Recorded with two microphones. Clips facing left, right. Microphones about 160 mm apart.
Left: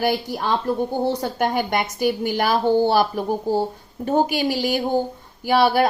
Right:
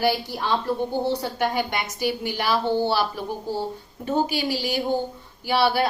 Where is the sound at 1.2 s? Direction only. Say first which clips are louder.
Left 3 dB; 50° left (ahead or behind).